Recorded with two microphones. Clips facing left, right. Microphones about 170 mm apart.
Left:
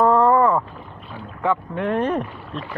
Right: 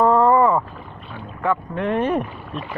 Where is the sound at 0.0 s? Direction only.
Centre (ahead or behind).